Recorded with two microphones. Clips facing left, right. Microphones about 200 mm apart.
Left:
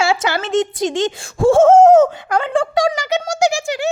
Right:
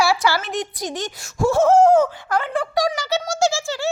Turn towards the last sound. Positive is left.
turn(degrees=20)  # may be behind; listen again after turning